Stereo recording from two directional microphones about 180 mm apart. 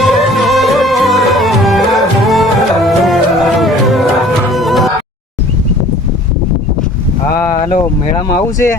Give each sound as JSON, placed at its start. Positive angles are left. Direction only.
{"t": 0.0, "sound": "music", "side_deg": 0}
{"t": 8.5, "sound": "speech", "side_deg": 15}